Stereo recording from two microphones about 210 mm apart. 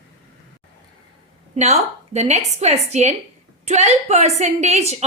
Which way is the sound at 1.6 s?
30° right (ahead or behind).